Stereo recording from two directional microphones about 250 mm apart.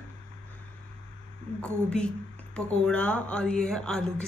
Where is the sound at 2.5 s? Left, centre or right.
Centre.